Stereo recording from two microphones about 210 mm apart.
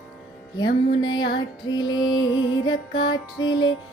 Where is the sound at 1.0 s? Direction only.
20° left (ahead or behind).